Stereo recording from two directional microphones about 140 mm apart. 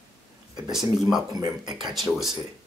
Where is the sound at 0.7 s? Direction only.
Centre (ahead or behind).